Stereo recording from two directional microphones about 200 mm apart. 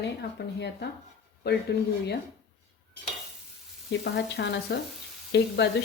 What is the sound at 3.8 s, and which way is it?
A woman's voice, 55° left (ahead or behind).